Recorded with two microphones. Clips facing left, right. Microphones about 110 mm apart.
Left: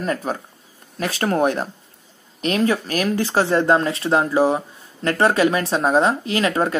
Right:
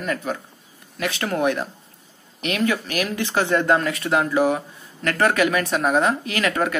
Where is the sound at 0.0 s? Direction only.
35° left (ahead or behind).